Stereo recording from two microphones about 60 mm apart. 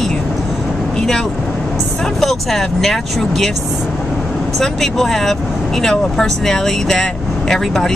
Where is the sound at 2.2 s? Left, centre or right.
Centre.